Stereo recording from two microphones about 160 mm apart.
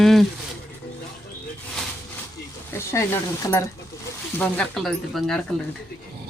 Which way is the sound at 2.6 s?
15° left (ahead or behind).